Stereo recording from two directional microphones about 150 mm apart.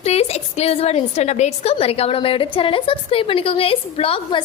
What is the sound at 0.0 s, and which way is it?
A woman's voice, 45° left (ahead or behind).